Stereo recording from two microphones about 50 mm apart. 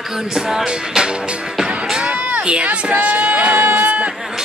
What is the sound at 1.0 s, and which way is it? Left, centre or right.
Speech, centre.